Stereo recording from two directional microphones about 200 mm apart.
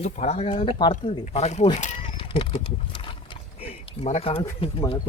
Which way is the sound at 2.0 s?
25° left (ahead or behind).